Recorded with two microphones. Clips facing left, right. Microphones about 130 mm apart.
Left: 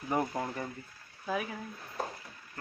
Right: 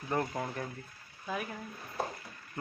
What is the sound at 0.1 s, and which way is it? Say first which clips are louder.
Speech: left 2 dB; 5° left (ahead or behind).